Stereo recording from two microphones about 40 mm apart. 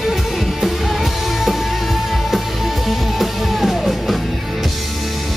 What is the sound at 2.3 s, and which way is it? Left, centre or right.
Music, centre.